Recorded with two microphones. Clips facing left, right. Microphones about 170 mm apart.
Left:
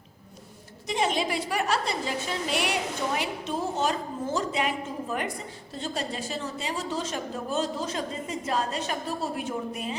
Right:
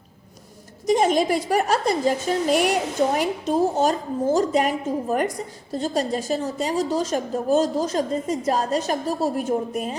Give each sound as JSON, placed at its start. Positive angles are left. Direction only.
{"t": 0.9, "sound": "a woman's voice", "side_deg": -45}